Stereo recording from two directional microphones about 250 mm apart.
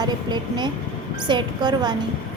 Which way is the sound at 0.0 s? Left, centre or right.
Centre.